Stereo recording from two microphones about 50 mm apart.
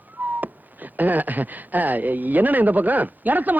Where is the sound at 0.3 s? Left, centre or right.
Right.